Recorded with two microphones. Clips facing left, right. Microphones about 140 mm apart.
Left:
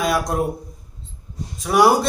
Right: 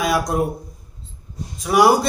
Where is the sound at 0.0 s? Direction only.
5° right (ahead or behind).